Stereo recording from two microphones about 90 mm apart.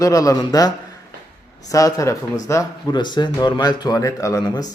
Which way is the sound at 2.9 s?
55° left (ahead or behind).